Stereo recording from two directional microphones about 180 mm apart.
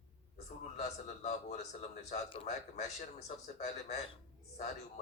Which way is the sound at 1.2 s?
40° left (ahead or behind).